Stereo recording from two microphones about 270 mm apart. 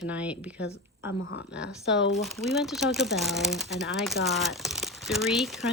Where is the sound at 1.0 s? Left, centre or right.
Left.